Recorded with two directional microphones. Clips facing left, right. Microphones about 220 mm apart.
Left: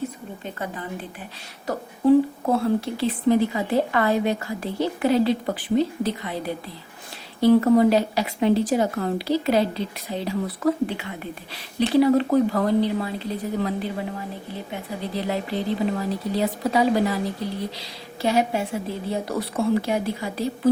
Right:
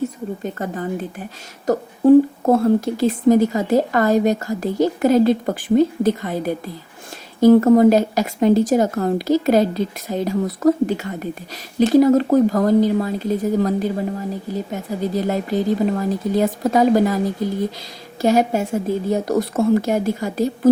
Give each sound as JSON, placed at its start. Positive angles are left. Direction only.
{"t": 0.4, "sound": "a woman's voice", "side_deg": -45}